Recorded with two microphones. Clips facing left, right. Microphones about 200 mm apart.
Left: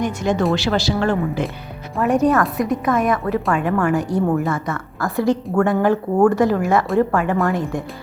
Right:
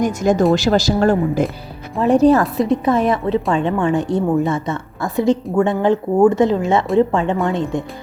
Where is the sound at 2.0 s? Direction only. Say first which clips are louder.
Right 4 dB; 30° right (ahead or behind).